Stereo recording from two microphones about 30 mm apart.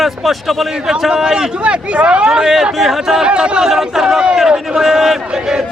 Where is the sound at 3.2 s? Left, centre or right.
Right.